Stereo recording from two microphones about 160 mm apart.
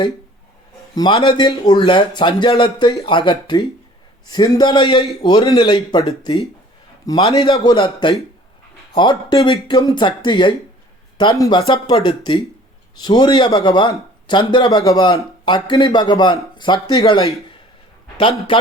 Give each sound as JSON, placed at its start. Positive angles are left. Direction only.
{"t": 0.9, "sound": "a man's voice", "side_deg": 30}